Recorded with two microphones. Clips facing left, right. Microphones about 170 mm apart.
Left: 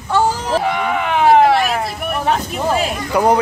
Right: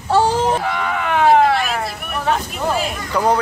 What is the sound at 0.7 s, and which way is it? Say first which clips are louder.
Speech: left 2 dB; 15° left (ahead or behind).